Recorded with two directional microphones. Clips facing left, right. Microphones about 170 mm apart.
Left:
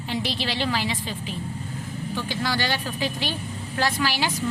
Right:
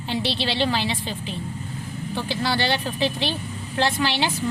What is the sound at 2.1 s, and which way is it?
A woman's voice, 30° right (ahead or behind).